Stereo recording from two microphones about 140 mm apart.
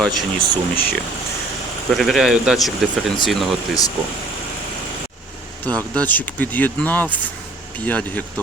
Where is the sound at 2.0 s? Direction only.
Centre (ahead or behind).